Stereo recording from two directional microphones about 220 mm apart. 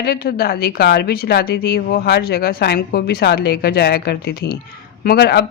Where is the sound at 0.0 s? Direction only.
45° left (ahead or behind).